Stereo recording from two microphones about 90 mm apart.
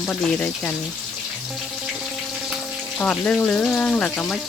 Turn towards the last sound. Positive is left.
turn(degrees=15)  # may be behind; listen again after turning